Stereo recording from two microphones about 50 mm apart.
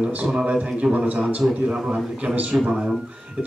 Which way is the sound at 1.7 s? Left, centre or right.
Centre.